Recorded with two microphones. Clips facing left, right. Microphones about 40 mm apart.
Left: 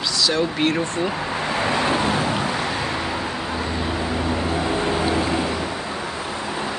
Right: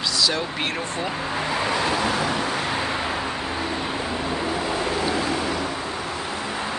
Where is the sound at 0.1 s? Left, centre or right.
Centre.